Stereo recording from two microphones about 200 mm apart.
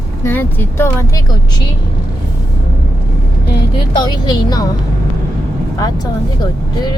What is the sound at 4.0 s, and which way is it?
Speech, 20° left (ahead or behind).